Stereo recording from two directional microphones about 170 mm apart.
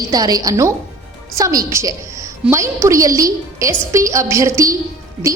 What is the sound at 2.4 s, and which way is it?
Speech, 5° right (ahead or behind).